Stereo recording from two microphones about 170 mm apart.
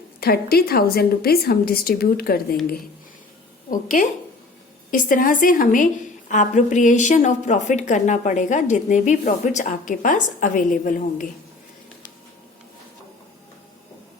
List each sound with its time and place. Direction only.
0.2 s a woman's voice: 65° left (ahead or behind)
3.7 s a woman's voice: 50° left (ahead or behind)